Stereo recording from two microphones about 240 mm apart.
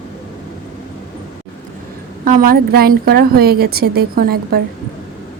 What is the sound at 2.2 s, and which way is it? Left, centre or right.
A woman's voice, right.